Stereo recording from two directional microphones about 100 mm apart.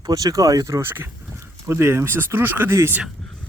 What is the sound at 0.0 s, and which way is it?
Speech, 40° right (ahead or behind).